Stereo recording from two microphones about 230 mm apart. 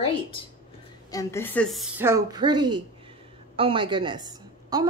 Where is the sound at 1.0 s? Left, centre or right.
Centre.